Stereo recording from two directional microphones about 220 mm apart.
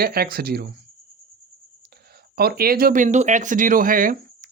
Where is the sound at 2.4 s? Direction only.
45° right (ahead or behind).